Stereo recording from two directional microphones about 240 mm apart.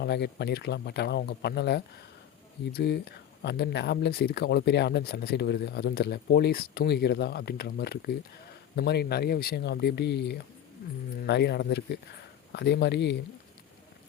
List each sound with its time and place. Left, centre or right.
0.0 s speech: left